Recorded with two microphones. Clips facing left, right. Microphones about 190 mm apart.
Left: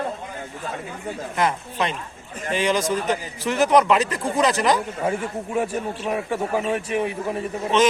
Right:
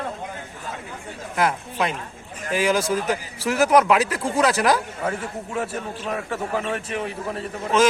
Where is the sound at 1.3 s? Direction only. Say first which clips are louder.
Right 1 dB; 5° right (ahead or behind).